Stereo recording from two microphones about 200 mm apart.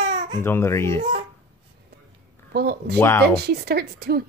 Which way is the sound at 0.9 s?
30° right (ahead or behind).